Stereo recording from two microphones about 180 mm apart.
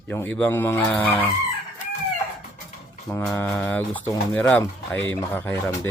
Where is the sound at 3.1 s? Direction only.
10° left (ahead or behind).